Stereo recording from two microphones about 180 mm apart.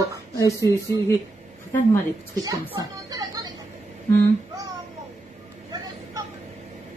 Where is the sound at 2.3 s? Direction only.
20° right (ahead or behind).